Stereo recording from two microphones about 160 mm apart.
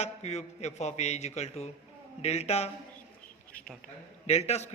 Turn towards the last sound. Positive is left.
turn(degrees=40)  # may be behind; listen again after turning